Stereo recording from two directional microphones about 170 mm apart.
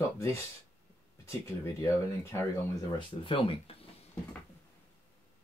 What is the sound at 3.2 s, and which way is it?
Speech, 30° left (ahead or behind).